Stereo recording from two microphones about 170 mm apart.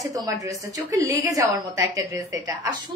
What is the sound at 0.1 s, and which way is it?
A woman's voice, 20° right (ahead or behind).